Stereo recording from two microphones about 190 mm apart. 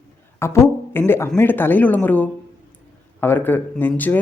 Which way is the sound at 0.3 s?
15° left (ahead or behind).